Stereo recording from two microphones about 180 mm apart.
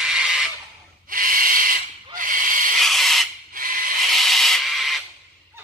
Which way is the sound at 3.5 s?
50° right (ahead or behind).